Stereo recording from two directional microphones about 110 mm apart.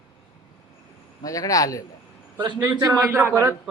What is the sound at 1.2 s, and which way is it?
Speech, 30° left (ahead or behind).